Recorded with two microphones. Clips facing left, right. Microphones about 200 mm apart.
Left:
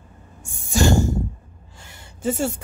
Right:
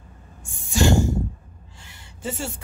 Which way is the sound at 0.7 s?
45° left (ahead or behind).